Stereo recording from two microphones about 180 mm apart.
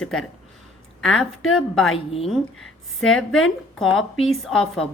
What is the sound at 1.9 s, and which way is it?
Speech, 35° left (ahead or behind).